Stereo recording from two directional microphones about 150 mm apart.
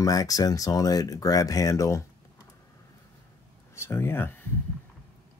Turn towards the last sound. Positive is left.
turn(degrees=15)  # may be behind; listen again after turning